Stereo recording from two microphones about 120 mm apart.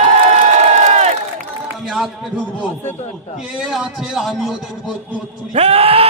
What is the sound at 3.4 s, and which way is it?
A man's voice, 5° right (ahead or behind).